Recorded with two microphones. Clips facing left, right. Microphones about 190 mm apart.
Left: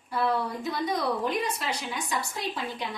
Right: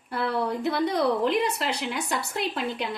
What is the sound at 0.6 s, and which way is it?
Speech, 65° right (ahead or behind).